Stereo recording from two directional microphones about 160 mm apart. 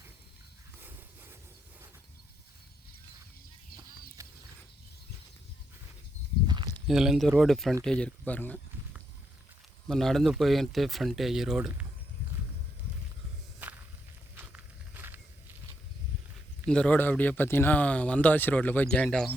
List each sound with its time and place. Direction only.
0.8 s a sound: 15° right (ahead or behind)
4.2 s a sound: 20° right (ahead or behind)
6.8 s speech: 5° right (ahead or behind)
9.8 s speech: 5° left (ahead or behind)
13.6 s walk: 10° right (ahead or behind)
16.6 s speech: 5° left (ahead or behind)